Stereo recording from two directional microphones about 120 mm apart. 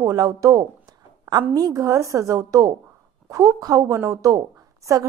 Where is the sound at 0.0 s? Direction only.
30° right (ahead or behind).